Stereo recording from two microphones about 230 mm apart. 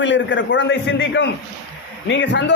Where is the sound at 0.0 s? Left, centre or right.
Left.